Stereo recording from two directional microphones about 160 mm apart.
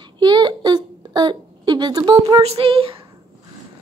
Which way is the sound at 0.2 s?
25° right (ahead or behind).